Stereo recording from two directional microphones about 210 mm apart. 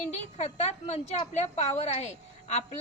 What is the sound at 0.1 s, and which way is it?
A woman's voice, 30° left (ahead or behind).